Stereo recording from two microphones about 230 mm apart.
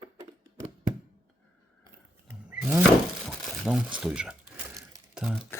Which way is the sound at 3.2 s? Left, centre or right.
Centre.